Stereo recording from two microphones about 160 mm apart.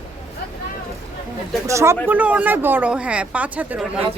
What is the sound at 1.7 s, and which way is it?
A man's voice, 20° right (ahead or behind).